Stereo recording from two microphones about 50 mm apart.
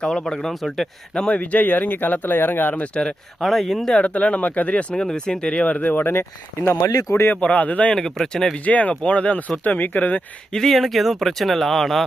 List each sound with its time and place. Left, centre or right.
0.0 s speech: centre
0.3 s speech: centre
1.1 s speech: centre
1.4 s speech: left
2.9 s speech: centre
3.4 s speech: centre
4.0 s speech: left
4.9 s speech: centre
5.7 s speech: left
7.3 s speech: left
7.9 s speech: centre
8.6 s speech: left
10.5 s speech: centre